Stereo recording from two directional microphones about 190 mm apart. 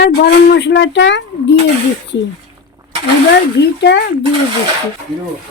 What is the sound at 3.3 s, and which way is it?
Speech, 65° left (ahead or behind).